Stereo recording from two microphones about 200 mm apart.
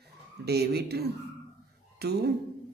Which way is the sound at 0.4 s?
55° right (ahead or behind).